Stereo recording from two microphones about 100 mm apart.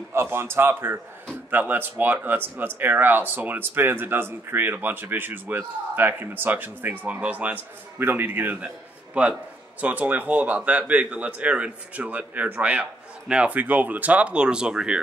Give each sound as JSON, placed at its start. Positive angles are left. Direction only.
{"t": 0.1, "sound": "speech", "side_deg": -25}
{"t": 9.8, "sound": "a man's voice", "side_deg": -15}